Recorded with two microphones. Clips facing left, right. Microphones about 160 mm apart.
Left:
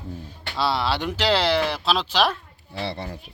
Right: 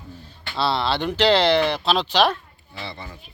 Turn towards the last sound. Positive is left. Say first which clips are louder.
# left 6 dB
turn(degrees=75)  # may be behind; listen again after turning